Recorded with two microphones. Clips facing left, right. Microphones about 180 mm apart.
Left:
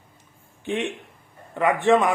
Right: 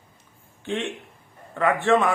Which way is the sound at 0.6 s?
15° left (ahead or behind).